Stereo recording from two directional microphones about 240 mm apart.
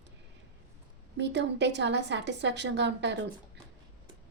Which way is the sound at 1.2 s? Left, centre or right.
Right.